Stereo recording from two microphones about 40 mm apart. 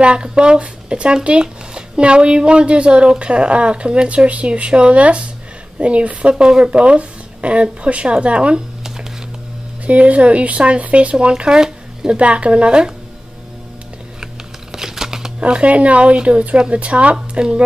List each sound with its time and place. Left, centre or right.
0.0 s speech: right
9.8 s speech: right; by 12.2 s centre
12.2 s speech: right
14.2 s shuffling cards: centre
15.4 s speech: right
16.8 s speech: right